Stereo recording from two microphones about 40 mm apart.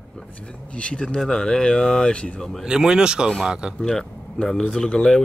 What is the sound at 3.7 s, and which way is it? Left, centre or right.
Speech, centre.